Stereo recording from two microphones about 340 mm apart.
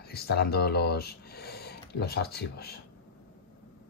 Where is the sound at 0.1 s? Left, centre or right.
Left.